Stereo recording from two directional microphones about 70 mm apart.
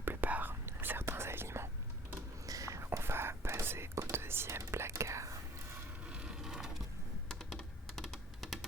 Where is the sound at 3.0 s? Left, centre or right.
Right.